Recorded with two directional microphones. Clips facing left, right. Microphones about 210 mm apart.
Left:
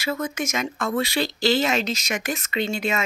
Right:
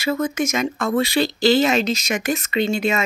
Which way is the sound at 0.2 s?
35° right (ahead or behind).